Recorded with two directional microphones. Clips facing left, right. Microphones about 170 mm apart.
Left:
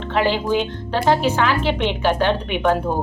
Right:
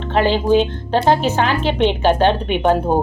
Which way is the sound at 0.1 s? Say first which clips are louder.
Right 4 dB; 30° right (ahead or behind).